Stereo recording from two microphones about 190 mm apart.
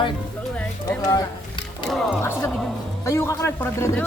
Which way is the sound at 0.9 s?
20° left (ahead or behind).